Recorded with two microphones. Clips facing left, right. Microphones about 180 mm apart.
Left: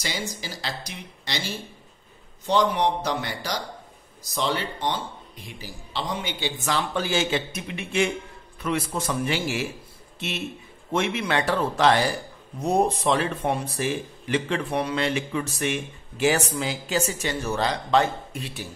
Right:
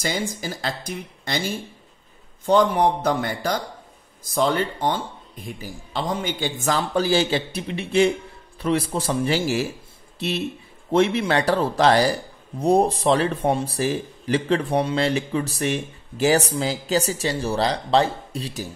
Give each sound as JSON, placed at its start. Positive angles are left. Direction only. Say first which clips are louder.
{"t": 0.0, "sound": "a man's voice", "louder": "right 6 dB", "side_deg": -50}